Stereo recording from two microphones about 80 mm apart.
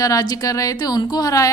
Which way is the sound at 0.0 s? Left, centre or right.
Left.